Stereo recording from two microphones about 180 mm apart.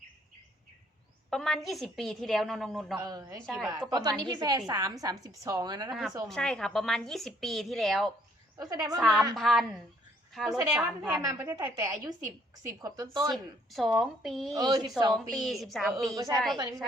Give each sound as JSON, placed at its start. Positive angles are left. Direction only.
{"t": 1.3, "sound": "a woman's voice", "side_deg": 5}
{"t": 3.0, "sound": "a woman's voice", "side_deg": -20}
{"t": 3.4, "sound": "a woman's voice", "side_deg": 0}
{"t": 3.7, "sound": "a woman's voice", "side_deg": -20}
{"t": 5.9, "sound": "a woman's voice", "side_deg": 0}
{"t": 8.5, "sound": "a woman's voice", "side_deg": -20}
{"t": 9.0, "sound": "a woman's voice", "side_deg": 0}
{"t": 13.3, "sound": "a woman's voice", "side_deg": 0}
{"t": 14.5, "sound": "a woman's voice", "side_deg": -20}
{"t": 15.1, "sound": "a woman's voice", "side_deg": 0}
{"t": 16.1, "sound": "a woman's voice", "side_deg": -20}